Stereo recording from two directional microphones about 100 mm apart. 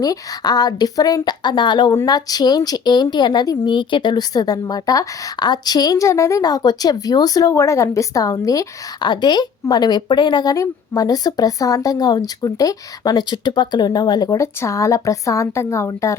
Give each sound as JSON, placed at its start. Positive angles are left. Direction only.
{"t": 0.0, "sound": "a woman's voice", "side_deg": 40}
{"t": 3.7, "sound": "a woman's voice", "side_deg": 50}
{"t": 7.5, "sound": "a woman's voice", "side_deg": 30}
{"t": 14.3, "sound": "a woman's voice", "side_deg": 30}